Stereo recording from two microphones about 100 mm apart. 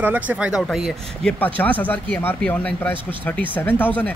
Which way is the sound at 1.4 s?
15° left (ahead or behind).